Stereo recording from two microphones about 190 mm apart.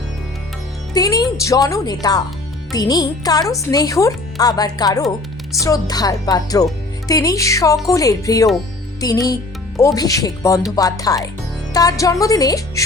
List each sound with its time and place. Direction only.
0.9 s a woman's voice: 20° left (ahead or behind)